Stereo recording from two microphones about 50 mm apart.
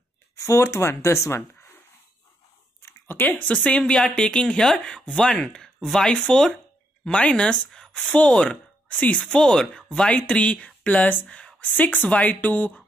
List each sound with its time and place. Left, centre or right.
0.5 s speech: left
3.1 s speech: left
9.2 s speech: centre
11.7 s speech: left